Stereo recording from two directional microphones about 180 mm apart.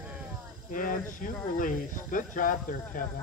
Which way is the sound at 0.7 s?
50° left (ahead or behind).